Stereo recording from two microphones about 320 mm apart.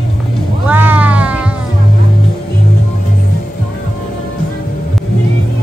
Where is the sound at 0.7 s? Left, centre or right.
Centre.